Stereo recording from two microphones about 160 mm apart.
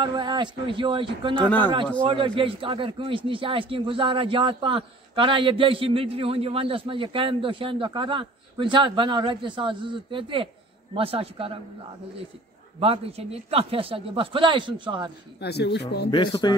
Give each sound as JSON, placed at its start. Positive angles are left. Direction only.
{"t": 0.0, "sound": "a man's voice", "side_deg": -30}
{"t": 12.8, "sound": "a man's voice", "side_deg": -40}
{"t": 15.4, "sound": "speech", "side_deg": 90}
{"t": 16.1, "sound": "speech", "side_deg": 30}